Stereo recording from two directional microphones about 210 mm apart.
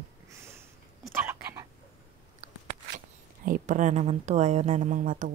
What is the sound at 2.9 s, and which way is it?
Speech, 40° right (ahead or behind).